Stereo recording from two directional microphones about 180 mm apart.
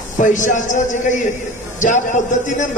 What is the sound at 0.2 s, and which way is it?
A man's voice, 45° left (ahead or behind).